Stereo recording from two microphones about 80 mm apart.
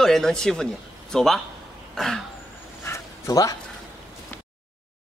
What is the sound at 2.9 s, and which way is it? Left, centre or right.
Dog, left.